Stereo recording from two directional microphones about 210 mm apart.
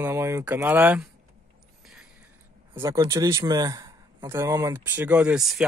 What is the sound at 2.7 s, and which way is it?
A man's voice, 15° right (ahead or behind).